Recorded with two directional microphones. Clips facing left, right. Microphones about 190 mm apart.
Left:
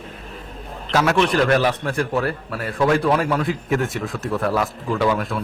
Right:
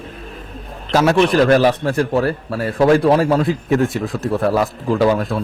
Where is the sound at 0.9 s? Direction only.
30° right (ahead or behind).